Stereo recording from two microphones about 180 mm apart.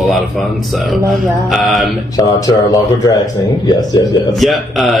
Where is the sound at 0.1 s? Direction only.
Centre (ahead or behind).